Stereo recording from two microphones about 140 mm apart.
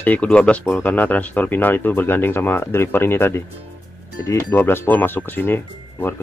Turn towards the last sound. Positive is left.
turn(degrees=15)  # may be behind; listen again after turning